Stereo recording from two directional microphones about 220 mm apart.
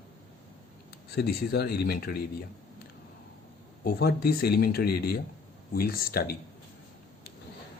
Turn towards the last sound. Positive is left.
turn(degrees=45)  # may be behind; listen again after turning